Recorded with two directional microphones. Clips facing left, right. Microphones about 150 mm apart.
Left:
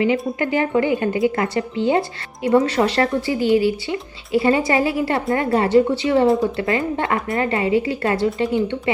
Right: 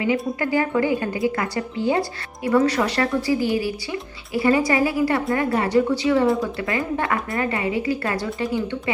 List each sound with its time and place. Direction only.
0.0 s a woman's voice: 25° left (ahead or behind)